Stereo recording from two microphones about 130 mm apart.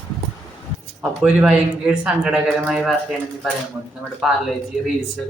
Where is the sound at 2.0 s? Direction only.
5° right (ahead or behind).